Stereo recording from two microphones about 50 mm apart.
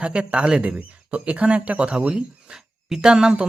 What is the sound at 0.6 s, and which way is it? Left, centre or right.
Speech, right.